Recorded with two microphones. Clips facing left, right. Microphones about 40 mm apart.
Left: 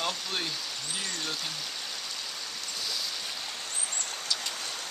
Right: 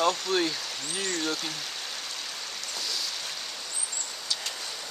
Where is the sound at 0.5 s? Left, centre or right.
Centre.